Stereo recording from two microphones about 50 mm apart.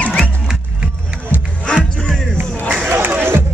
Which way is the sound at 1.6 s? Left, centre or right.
Centre.